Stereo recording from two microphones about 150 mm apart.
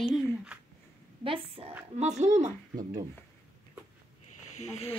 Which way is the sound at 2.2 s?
50° right (ahead or behind).